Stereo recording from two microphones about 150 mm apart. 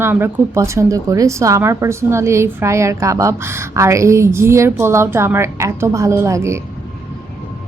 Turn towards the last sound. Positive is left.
turn(degrees=-20)  # may be behind; listen again after turning